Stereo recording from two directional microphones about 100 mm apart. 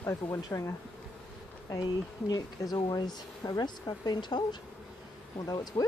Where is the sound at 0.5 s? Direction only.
25° left (ahead or behind).